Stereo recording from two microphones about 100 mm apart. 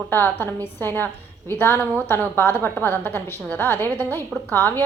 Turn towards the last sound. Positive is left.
turn(degrees=20)  # may be behind; listen again after turning